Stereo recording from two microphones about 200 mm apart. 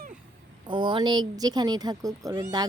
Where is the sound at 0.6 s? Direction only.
25° right (ahead or behind).